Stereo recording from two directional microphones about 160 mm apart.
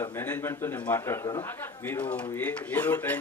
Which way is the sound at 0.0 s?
15° left (ahead or behind).